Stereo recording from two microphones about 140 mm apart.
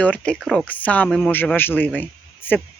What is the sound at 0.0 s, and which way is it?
A man's voice, 10° left (ahead or behind).